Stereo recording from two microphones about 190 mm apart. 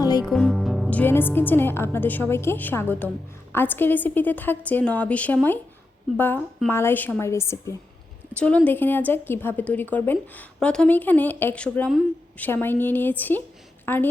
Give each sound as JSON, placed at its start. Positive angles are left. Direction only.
{"t": 0.0, "sound": "music", "side_deg": 20}
{"t": 0.3, "sound": "a woman's voice", "side_deg": 0}